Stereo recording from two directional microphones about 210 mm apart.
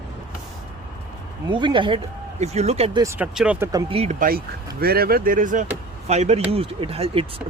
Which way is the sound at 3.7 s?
20° right (ahead or behind).